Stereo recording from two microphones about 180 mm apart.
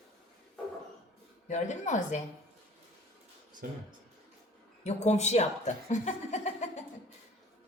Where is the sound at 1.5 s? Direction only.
40° left (ahead or behind).